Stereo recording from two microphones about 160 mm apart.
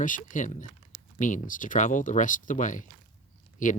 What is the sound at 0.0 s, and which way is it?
Speech, 55° left (ahead or behind).